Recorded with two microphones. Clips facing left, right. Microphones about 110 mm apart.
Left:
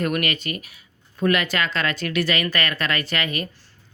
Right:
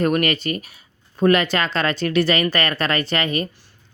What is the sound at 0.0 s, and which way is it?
Speech, 35° right (ahead or behind).